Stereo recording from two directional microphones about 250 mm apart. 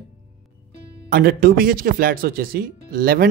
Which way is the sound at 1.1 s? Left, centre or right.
Right.